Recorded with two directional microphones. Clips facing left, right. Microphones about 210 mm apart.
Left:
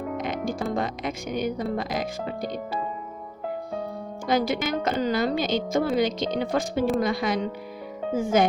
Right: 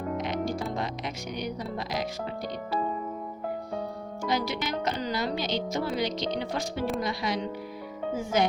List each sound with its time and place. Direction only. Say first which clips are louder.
0.2 s speech: left 2 dB; 50° left (ahead or behind)
4.2 s speech: left 5 dB; 50° left (ahead or behind)